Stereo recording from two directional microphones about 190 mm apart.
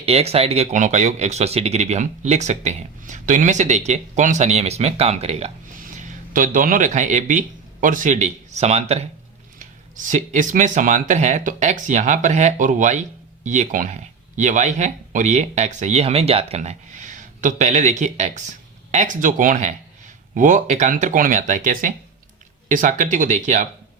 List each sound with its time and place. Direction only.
0.0 s speech: 35° right (ahead or behind)